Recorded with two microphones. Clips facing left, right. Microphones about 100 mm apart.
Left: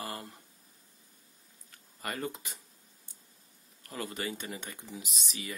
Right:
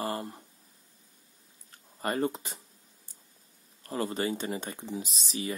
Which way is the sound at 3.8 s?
30° right (ahead or behind).